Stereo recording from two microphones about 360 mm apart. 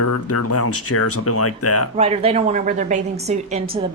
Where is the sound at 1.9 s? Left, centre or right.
Centre.